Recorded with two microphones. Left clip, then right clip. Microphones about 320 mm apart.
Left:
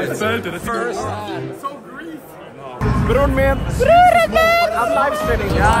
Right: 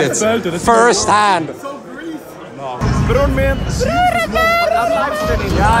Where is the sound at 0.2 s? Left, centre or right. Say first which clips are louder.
Right 5 dB; centre.